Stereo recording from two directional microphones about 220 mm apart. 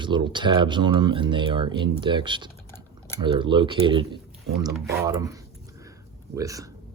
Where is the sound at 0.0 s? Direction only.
20° right (ahead or behind).